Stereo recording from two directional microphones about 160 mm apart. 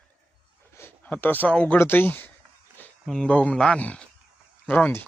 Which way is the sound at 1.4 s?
10° left (ahead or behind).